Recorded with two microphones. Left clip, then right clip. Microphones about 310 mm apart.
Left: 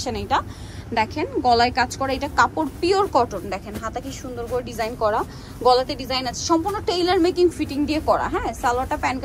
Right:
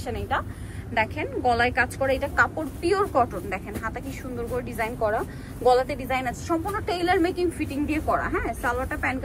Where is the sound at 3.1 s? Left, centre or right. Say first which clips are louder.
Left 3 dB; centre.